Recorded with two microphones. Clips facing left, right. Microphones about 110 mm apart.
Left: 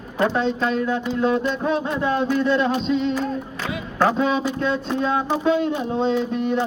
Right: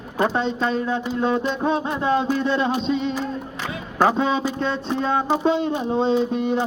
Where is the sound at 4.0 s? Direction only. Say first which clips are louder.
Even; 25° right (ahead or behind).